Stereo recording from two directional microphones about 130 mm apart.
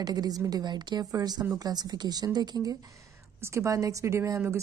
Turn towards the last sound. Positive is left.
turn(degrees=-20)  # may be behind; listen again after turning